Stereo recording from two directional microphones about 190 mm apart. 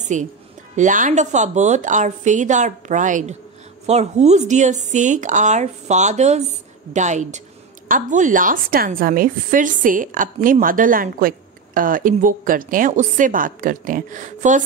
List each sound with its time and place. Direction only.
0.0 s a woman's voice: 40° right (ahead or behind)